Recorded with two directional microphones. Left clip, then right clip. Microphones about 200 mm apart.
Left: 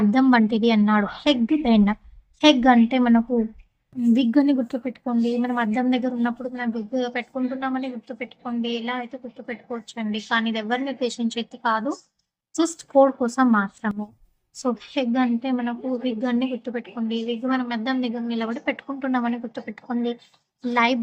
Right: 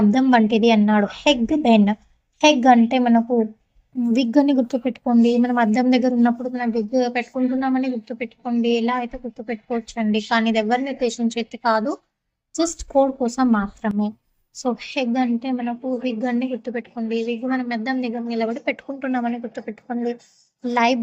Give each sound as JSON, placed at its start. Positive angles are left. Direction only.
{"t": 0.1, "sound": "a woman's voice", "side_deg": -5}